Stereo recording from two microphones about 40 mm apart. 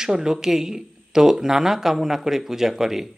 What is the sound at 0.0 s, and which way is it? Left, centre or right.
A man's voice, centre.